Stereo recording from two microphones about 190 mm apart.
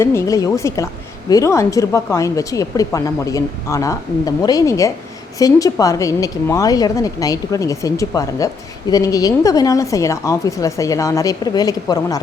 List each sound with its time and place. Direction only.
0.0 s a woman's voice: 15° left (ahead or behind)